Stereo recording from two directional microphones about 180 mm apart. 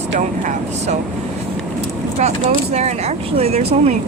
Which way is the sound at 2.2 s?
40° right (ahead or behind).